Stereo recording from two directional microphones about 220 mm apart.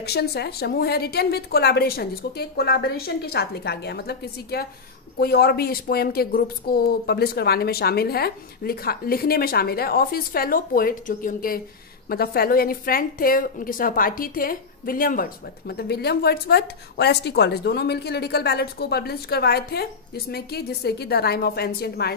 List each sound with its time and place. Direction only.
0.0 s a woman's voice: 45° left (ahead or behind)